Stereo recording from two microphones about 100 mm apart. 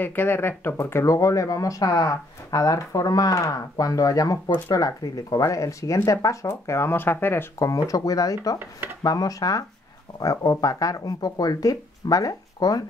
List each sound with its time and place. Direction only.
0.0 s speech: 20° left (ahead or behind); by 12.8 s 40° left (ahead or behind)